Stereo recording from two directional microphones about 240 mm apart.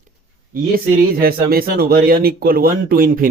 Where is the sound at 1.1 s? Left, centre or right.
Right.